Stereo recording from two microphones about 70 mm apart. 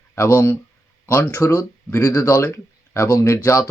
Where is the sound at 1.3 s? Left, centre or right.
Left.